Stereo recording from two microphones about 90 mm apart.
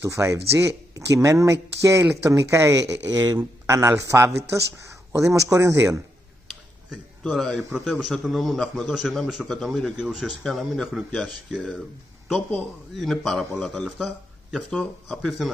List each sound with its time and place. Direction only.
0.0 s speech: 35° right (ahead or behind)
3.6 s speech: 35° right (ahead or behind)
6.9 s a man's voice: centre (ahead or behind)
12.9 s a man's voice: centre (ahead or behind)